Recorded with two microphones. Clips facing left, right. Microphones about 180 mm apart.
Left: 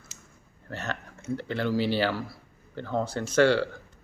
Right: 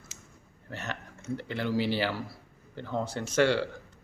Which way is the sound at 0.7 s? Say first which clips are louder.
Left 3 dB; 15° right (ahead or behind).